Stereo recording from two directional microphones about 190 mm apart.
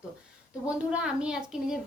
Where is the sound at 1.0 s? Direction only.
5° right (ahead or behind).